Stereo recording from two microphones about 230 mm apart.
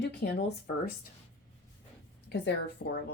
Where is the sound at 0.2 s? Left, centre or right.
Left.